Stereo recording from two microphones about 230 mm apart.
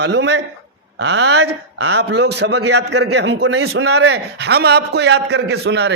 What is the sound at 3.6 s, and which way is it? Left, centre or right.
Speech, right.